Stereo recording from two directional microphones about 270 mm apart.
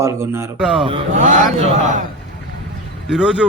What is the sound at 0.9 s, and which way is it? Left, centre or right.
Speech, right.